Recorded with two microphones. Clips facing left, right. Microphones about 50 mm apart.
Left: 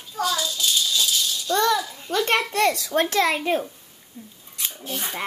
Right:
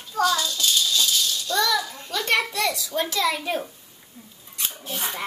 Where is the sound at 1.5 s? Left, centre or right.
Left.